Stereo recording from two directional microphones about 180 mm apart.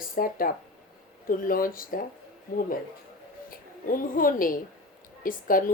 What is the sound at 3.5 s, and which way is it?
A woman's voice, 50° left (ahead or behind).